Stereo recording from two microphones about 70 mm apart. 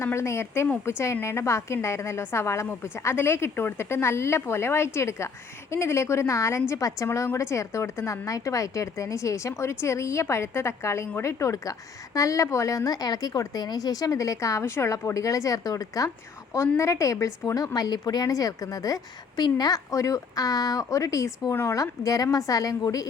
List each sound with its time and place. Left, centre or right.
0.0 s a woman's voice: left
17.4 s a woman's voice: left
17.7 s a woman's voice: left
19.4 s a woman's voice: left
21.5 s a woman's voice: left
21.8 s a woman's voice: left